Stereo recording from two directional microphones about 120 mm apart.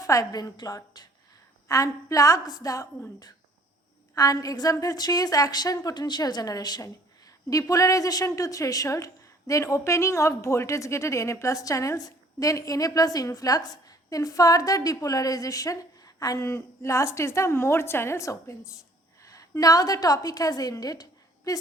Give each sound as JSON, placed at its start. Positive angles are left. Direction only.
{"t": 0.0, "sound": "a woman's voice", "side_deg": 30}